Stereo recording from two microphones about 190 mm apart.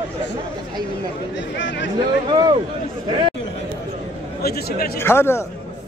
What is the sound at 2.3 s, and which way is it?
Speech, 20° right (ahead or behind).